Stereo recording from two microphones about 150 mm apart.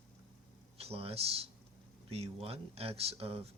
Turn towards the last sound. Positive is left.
turn(degrees=-40)  # may be behind; listen again after turning